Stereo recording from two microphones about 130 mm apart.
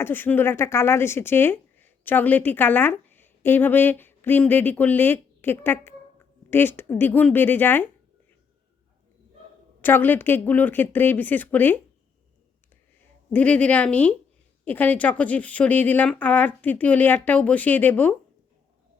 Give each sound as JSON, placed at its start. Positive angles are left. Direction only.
{"t": 0.0, "sound": "a woman's voice", "side_deg": 15}
{"t": 9.8, "sound": "a woman's voice", "side_deg": 15}
{"t": 13.3, "sound": "a woman's voice", "side_deg": 10}